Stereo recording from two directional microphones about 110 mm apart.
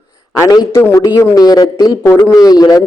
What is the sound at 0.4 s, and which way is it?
A man's voice, 35° left (ahead or behind).